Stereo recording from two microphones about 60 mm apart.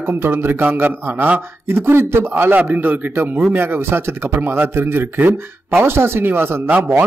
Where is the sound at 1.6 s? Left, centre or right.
Right.